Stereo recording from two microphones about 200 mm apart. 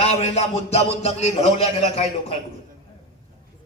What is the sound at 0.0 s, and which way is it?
A man's voice, 30° left (ahead or behind).